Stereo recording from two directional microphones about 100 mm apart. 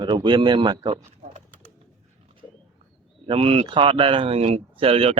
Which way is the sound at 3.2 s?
75° right (ahead or behind).